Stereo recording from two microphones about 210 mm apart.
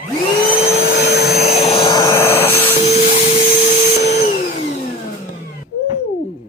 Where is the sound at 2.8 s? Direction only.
35° left (ahead or behind).